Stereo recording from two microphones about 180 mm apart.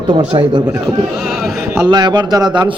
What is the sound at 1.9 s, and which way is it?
Speech, 25° right (ahead or behind).